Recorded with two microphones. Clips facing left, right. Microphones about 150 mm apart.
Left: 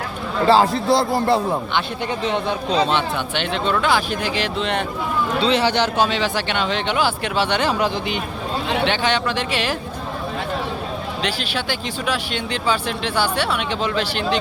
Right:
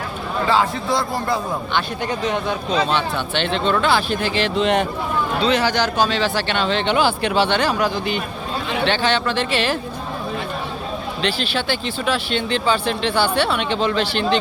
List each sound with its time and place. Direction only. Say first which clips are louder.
0.4 s a man's voice: left 5 dB; 35° left (ahead or behind)
2.9 s speech: even; 10° left (ahead or behind)
4.5 s speech: right 5 dB; 5° right (ahead or behind)
5.4 s speech: left 1 dB; 30° left (ahead or behind); by 7.5 s 5° left (ahead or behind)
7.5 s speech: right 1 dB; 20° left (ahead or behind)
11.2 s speech: right 4 dB; 10° left (ahead or behind)